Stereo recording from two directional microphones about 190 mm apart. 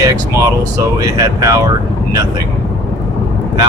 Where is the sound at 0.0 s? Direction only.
15° right (ahead or behind).